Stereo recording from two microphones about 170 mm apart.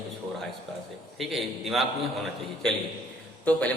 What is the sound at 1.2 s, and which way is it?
A man's voice, centre (ahead or behind).